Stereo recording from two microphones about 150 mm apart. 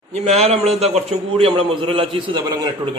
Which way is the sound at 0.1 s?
45° right (ahead or behind).